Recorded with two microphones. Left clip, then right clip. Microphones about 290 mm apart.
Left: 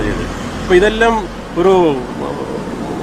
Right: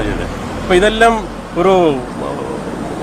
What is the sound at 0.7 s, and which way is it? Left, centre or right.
A man's voice, right.